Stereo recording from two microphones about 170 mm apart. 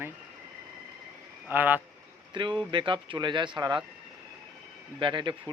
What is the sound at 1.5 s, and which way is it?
Speech, 10° right (ahead or behind).